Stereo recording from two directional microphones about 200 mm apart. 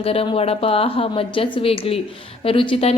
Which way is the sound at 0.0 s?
30° left (ahead or behind).